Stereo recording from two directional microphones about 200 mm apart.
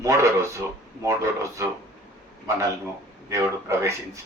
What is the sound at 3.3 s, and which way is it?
Speech, 15° right (ahead or behind).